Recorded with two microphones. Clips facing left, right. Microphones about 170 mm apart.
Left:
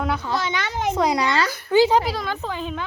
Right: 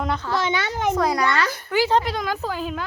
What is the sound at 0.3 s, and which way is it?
Speech, 55° right (ahead or behind).